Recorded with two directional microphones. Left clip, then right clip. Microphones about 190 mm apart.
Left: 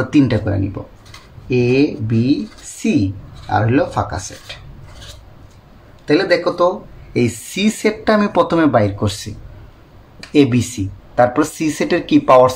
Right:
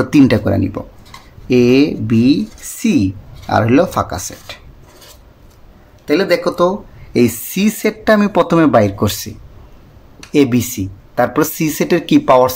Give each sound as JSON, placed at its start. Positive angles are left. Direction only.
{"t": 0.0, "sound": "speech", "side_deg": -45}
{"t": 6.0, "sound": "speech", "side_deg": -35}
{"t": 10.3, "sound": "speech", "side_deg": -30}